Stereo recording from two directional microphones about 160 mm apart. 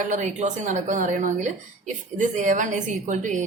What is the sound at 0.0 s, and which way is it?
A woman's voice, 50° right (ahead or behind).